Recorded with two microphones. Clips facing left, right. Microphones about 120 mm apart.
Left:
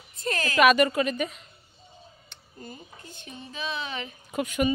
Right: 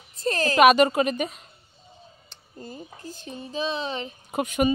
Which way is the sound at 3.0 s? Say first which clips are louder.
Right 6 dB; 35° right (ahead or behind).